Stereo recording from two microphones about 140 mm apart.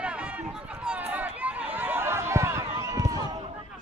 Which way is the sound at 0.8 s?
10° right (ahead or behind).